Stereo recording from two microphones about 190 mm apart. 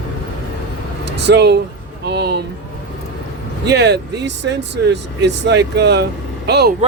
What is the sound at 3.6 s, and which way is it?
Speech, 60° right (ahead or behind).